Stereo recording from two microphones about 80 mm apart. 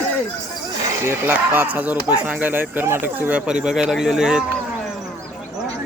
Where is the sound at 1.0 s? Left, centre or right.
Right.